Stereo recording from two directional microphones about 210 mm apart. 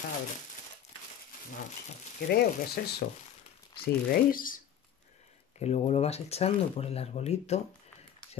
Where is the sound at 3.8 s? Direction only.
40° left (ahead or behind).